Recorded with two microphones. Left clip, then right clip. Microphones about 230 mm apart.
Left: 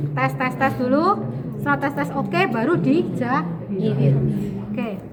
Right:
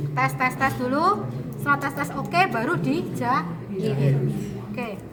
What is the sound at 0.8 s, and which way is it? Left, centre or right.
Speech, right.